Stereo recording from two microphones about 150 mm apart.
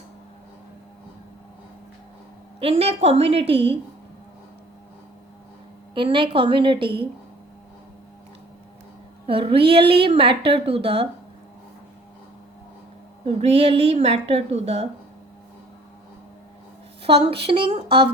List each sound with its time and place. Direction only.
2.6 s speech: 40° right (ahead or behind)
5.9 s speech: 35° right (ahead or behind)
9.2 s speech: 40° right (ahead or behind)
13.2 s a woman's voice: 40° right (ahead or behind)
17.0 s a woman's voice: 40° right (ahead or behind)